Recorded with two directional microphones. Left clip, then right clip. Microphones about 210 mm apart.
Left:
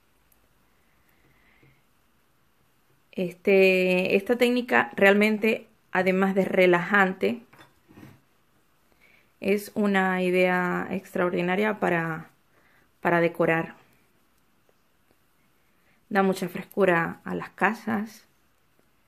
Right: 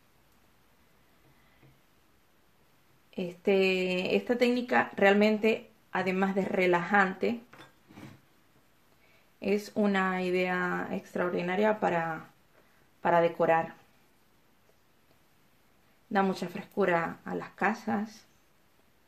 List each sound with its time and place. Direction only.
3.1 s speech: 40° left (ahead or behind)
9.4 s speech: 40° left (ahead or behind)
16.1 s speech: 40° left (ahead or behind)